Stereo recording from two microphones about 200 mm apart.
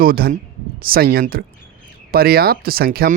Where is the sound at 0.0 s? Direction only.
45° right (ahead or behind).